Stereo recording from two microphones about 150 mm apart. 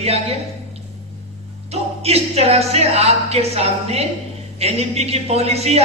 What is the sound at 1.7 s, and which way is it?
Speech, 45° right (ahead or behind).